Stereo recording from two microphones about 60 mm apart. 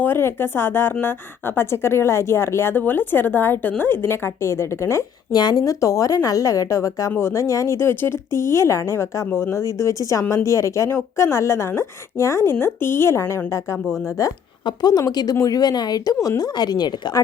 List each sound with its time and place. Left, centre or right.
0.0 s a woman's voice: left
5.5 s a woman's voice: left
7.8 s speech: left
12.5 s speech: left
14.8 s speech: left